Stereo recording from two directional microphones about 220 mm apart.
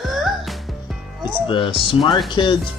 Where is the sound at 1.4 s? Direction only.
25° left (ahead or behind).